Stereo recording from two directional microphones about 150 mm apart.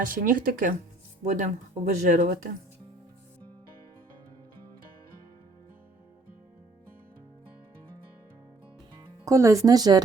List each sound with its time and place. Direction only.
0.0 s speech: 65° right (ahead or behind)
1.2 s speech: 55° right (ahead or behind)
9.2 s speech: 20° right (ahead or behind)